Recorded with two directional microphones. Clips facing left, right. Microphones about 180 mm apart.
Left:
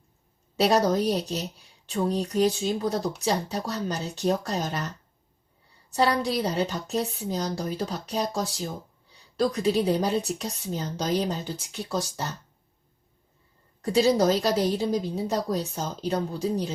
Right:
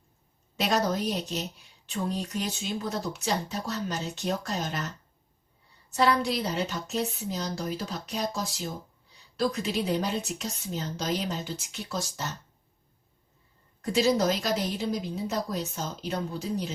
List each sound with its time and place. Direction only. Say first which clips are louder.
0.6 s speech: left 5 dB; 35° left (ahead or behind)
5.9 s speech: left 1 dB; 35° left (ahead or behind)
13.8 s speech: left 3 dB; 35° left (ahead or behind)